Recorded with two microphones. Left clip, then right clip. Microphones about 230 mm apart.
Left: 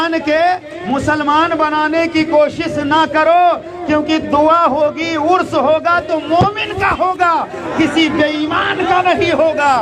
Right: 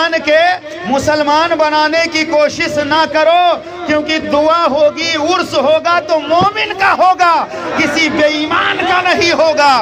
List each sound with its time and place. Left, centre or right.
0.0 s a man's voice: right